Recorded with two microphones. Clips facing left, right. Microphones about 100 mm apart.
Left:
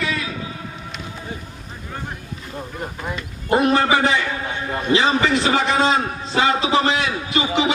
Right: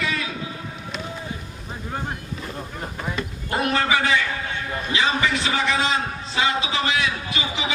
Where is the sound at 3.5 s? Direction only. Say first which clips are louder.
Left 6 dB; 30° left (ahead or behind).